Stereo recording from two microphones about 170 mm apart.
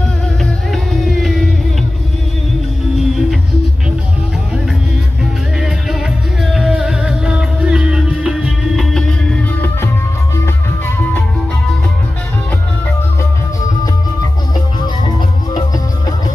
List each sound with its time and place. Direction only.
0.4 s music: centre (ahead or behind)
3.0 s music: centre (ahead or behind)
6.4 s music: centre (ahead or behind)
14.8 s music: 25° left (ahead or behind)